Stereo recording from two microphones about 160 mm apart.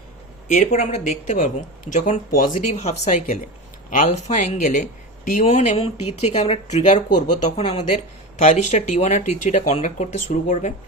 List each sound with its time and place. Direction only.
0.4 s speech: 50° left (ahead or behind)
7.6 s speech: 35° left (ahead or behind)
8.4 s speech: 45° left (ahead or behind)